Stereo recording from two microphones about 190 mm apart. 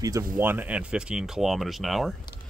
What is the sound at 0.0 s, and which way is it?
Speech, 15° right (ahead or behind).